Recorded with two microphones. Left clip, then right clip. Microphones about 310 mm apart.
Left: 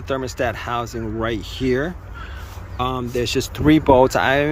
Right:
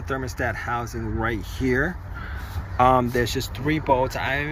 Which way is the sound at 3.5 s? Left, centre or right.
Centre.